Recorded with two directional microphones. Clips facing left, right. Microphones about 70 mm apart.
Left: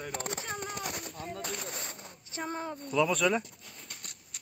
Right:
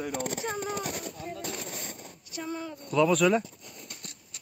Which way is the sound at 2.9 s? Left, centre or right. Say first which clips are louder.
Right 5 dB; centre.